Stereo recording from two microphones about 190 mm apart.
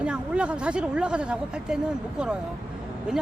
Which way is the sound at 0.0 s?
5° right (ahead or behind).